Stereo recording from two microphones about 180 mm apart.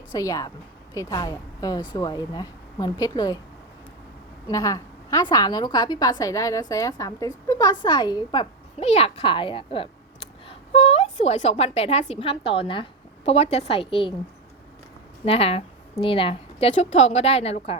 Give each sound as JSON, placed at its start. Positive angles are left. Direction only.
{"t": 0.1, "sound": "a woman's voice", "side_deg": 20}
{"t": 4.4, "sound": "a woman's voice", "side_deg": 20}
{"t": 8.8, "sound": "speech", "side_deg": 35}
{"t": 15.2, "sound": "a woman's voice", "side_deg": 35}